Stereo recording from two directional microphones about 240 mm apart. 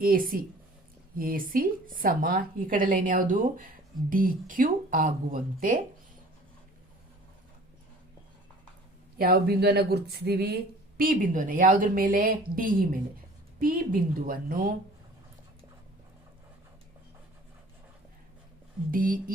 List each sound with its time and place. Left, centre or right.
0.0 s speech: right
9.1 s speech: right
18.9 s speech: right